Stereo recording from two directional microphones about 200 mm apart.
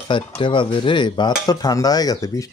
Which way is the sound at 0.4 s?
25° left (ahead or behind).